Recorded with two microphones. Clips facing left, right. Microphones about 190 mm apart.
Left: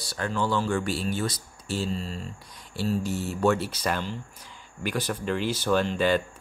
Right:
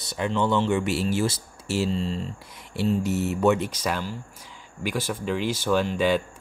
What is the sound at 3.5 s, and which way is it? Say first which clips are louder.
Speech: right 1 dB; 10° right (ahead or behind).